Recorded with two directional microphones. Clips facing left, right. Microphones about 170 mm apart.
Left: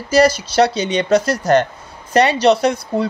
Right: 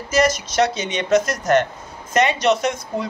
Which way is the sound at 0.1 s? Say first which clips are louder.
Left 5 dB; 30° left (ahead or behind).